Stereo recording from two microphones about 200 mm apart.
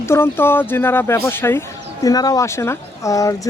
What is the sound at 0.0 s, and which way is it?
Speech, 10° left (ahead or behind).